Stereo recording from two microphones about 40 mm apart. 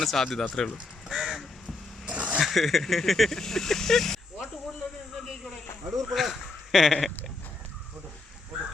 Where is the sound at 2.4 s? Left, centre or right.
Centre.